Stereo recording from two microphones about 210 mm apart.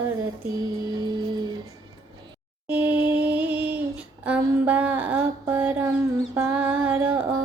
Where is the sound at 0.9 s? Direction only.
20° right (ahead or behind).